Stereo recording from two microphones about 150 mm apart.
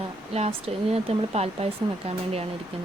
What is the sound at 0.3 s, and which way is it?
Speech, 45° right (ahead or behind).